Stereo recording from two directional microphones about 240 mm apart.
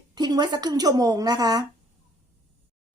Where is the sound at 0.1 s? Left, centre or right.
Centre.